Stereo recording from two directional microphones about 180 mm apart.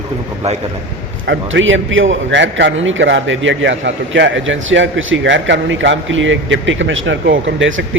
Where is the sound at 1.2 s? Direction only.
85° right.